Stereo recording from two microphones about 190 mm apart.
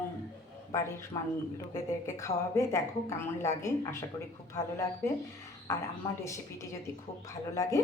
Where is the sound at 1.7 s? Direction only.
15° left (ahead or behind).